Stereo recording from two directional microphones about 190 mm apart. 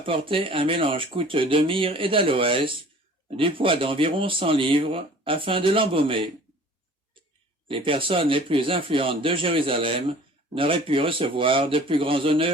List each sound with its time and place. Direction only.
0.0 s a man's voice: 25° right (ahead or behind)
7.7 s a man's voice: 25° right (ahead or behind)